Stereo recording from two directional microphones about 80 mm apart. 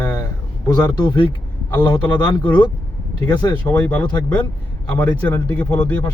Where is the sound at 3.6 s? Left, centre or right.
Left.